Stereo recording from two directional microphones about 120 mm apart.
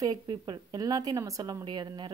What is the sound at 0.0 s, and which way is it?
Speech, 35° right (ahead or behind).